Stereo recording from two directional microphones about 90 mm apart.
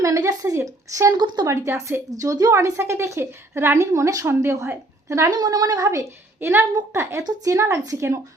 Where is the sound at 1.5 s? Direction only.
30° right (ahead or behind).